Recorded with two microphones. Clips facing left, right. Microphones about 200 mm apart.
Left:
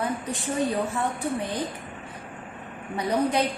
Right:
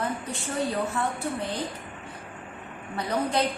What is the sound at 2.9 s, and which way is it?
Speech, 15° left (ahead or behind).